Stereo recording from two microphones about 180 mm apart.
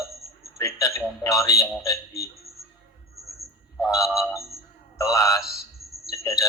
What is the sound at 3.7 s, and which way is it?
A man's voice, 20° left (ahead or behind).